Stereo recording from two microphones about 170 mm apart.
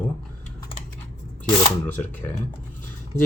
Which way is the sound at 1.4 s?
10° left (ahead or behind).